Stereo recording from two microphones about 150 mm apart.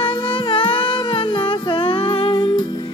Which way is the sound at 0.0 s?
35° left (ahead or behind).